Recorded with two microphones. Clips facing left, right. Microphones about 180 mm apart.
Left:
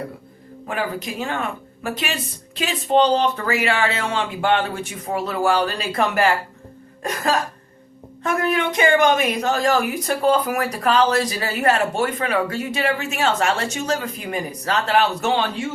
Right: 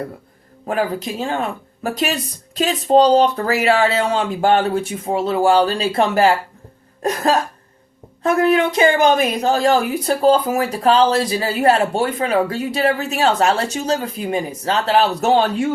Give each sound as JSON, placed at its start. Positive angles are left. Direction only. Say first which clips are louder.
{"t": 0.7, "sound": "a woman's voice", "louder": "right 5 dB", "side_deg": -35}